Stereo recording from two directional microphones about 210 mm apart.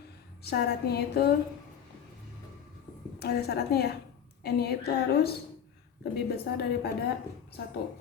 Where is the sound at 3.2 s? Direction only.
50° left (ahead or behind).